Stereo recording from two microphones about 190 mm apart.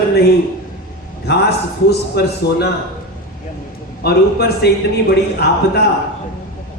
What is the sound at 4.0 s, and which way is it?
Speech, 55° left (ahead or behind).